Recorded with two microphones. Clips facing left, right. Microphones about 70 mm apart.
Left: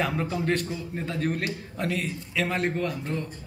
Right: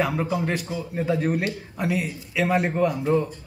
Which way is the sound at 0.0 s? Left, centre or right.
Centre.